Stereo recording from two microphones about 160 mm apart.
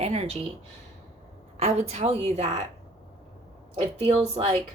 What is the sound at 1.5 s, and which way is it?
A woman's voice, 40° right (ahead or behind).